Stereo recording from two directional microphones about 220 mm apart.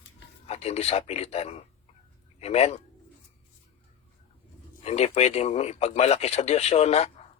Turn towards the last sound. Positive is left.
turn(degrees=30)  # may be behind; listen again after turning